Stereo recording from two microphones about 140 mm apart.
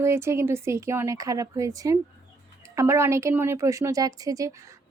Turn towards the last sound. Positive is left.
turn(degrees=-25)  # may be behind; listen again after turning